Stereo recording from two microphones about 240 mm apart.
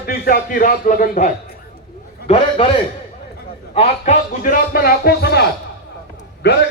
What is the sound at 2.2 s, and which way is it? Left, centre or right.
Speech, left.